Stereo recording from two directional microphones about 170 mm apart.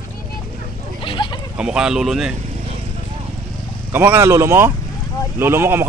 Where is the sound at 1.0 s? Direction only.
30° left (ahead or behind).